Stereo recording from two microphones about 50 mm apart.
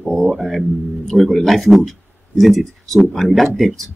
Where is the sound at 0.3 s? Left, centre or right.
Centre.